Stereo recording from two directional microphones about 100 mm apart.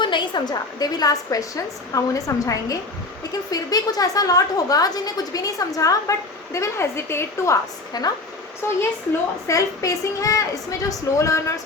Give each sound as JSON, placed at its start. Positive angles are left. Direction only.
{"t": 0.0, "sound": "a woman's voice", "side_deg": 50}
{"t": 7.9, "sound": "a woman's voice", "side_deg": 40}
{"t": 8.6, "sound": "a woman's voice", "side_deg": 25}